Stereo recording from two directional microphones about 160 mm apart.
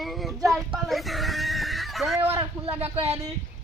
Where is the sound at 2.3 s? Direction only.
35° right (ahead or behind).